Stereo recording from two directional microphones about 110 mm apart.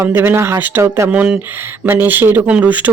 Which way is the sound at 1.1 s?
15° right (ahead or behind).